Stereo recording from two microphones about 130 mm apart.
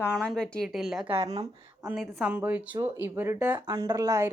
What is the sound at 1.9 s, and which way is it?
Speech, centre (ahead or behind).